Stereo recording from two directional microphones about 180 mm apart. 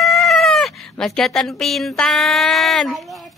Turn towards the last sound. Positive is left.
turn(degrees=0)  # may be behind; listen again after turning